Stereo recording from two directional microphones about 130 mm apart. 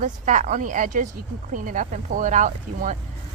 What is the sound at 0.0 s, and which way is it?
A woman's voice, 75° right (ahead or behind).